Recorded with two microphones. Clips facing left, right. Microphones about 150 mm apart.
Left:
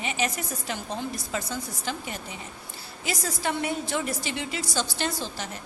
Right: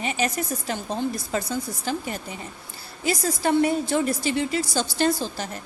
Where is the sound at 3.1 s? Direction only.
40° right (ahead or behind).